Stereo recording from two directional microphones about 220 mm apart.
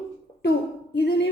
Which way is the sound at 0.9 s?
50° left (ahead or behind).